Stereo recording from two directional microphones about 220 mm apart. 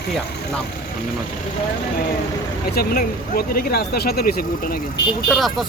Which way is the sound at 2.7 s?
40° left (ahead or behind).